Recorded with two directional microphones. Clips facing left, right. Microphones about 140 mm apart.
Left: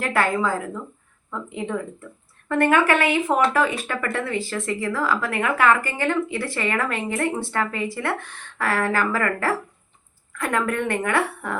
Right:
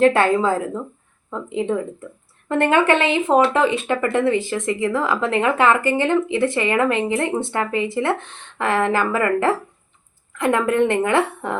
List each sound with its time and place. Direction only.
0.0 s speech: 25° right (ahead or behind)